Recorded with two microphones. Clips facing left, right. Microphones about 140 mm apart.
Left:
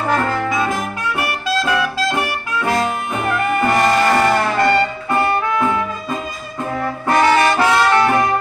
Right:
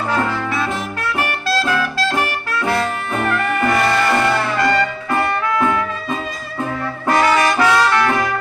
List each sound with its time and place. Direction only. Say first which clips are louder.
1.2 s music: even; 10° left (ahead or behind)
3.7 s music: left 2 dB; 40° left (ahead or behind)
4.6 s music: left 2 dB; 25° left (ahead or behind)
7.2 s brass instrument: left 1 dB; 25° left (ahead or behind)